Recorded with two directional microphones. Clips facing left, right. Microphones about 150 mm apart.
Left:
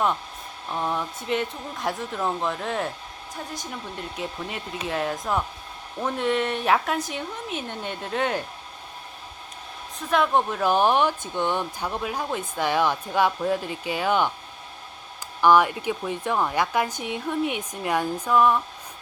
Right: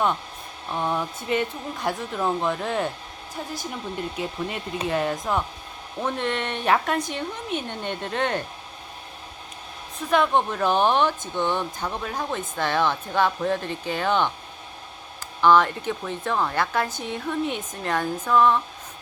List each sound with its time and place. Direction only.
0.7 s speech: centre (ahead or behind)
10.1 s speech: centre (ahead or behind)
15.4 s speech: 10° left (ahead or behind)